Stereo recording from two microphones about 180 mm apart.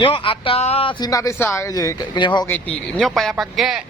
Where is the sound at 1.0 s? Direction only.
20° left (ahead or behind).